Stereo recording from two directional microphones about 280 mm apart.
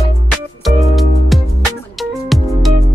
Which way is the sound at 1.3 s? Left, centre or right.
Centre.